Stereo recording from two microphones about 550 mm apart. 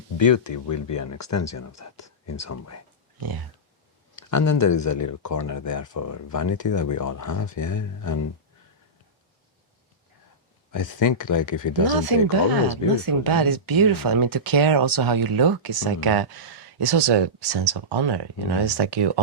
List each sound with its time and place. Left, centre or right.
0.2 s speech: left
4.1 s speech: left
10.7 s speech: left
11.9 s speech: right